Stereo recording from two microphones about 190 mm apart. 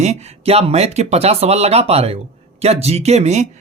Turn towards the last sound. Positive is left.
turn(degrees=-35)  # may be behind; listen again after turning